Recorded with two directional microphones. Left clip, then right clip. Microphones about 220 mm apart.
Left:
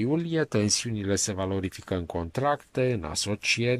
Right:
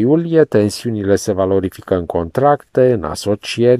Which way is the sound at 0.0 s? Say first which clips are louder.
Right 15 dB; 25° right (ahead or behind).